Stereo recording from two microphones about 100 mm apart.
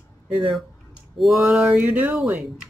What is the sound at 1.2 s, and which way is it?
Speech, 60° right (ahead or behind).